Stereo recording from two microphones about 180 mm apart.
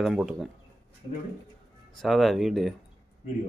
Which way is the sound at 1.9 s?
Centre (ahead or behind).